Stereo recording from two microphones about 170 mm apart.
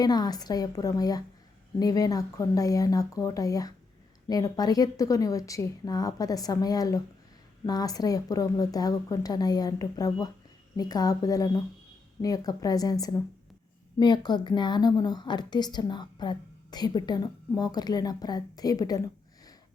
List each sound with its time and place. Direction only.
0.0 s a woman's voice: 25° left (ahead or behind)